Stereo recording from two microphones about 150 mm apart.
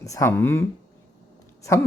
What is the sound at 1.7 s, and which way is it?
Speech, 20° left (ahead or behind).